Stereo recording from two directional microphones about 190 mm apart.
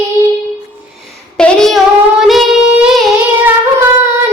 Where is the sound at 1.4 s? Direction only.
5° left (ahead or behind).